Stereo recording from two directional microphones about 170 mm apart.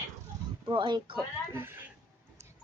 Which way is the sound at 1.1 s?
15° right (ahead or behind).